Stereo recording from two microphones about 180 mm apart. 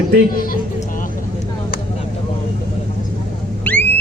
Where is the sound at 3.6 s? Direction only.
10° left (ahead or behind).